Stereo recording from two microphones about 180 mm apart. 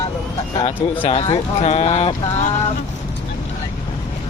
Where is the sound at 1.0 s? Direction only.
30° left (ahead or behind).